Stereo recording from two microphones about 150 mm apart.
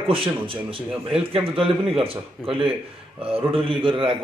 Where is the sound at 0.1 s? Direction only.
35° right (ahead or behind).